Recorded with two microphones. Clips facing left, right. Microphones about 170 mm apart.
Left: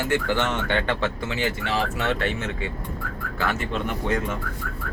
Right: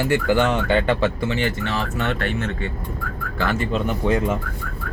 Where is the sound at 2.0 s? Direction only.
10° left (ahead or behind).